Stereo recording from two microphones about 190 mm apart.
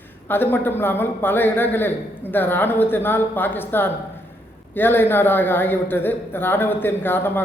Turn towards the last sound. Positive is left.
turn(degrees=10)  # may be behind; listen again after turning